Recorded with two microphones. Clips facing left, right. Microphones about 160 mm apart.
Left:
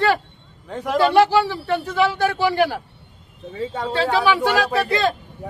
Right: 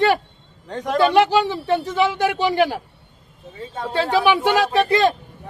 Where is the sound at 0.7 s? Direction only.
5° left (ahead or behind).